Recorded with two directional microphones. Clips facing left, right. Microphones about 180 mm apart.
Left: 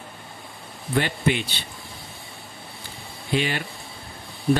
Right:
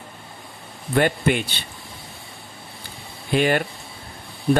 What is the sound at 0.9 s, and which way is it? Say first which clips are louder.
Speech: right 4 dB; 50° right (ahead or behind).